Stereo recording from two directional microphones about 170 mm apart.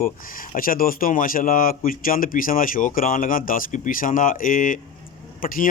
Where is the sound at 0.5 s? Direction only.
55° left (ahead or behind).